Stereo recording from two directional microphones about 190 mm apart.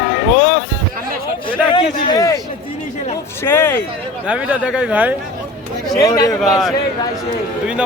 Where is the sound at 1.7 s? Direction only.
25° left (ahead or behind).